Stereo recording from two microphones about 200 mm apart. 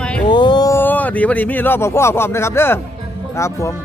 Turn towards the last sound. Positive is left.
turn(degrees=15)  # may be behind; listen again after turning